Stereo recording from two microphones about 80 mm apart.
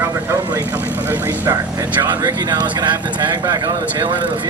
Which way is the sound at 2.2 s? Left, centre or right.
Right.